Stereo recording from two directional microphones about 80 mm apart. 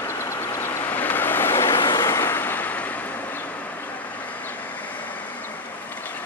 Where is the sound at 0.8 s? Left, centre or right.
Left.